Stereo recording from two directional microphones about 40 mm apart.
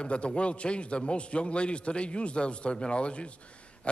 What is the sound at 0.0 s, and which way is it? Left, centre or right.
A man's voice, left.